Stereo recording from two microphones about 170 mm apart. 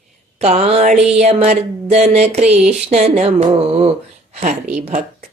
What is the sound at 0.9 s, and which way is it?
Music, 5° right (ahead or behind).